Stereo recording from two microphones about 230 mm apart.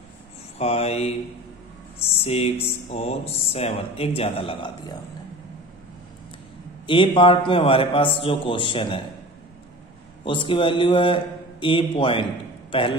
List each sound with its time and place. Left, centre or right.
0.6 s speech: left
6.9 s speech: left
10.2 s speech: left